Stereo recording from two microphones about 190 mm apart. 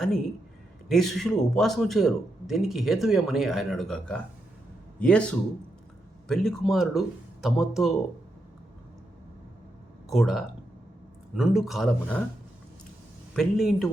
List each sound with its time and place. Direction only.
0.9 s a man's voice: centre (ahead or behind)
10.1 s a man's voice: centre (ahead or behind)
13.3 s a man's voice: centre (ahead or behind)